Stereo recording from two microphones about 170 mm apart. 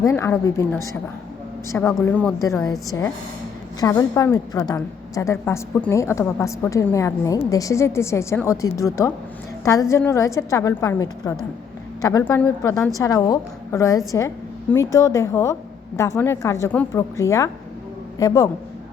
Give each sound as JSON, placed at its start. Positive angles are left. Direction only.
{"t": 0.0, "sound": "a woman's voice", "side_deg": 15}
{"t": 3.8, "sound": "a woman's voice", "side_deg": 20}